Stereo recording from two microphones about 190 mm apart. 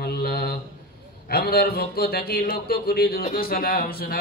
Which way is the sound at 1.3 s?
55° left (ahead or behind).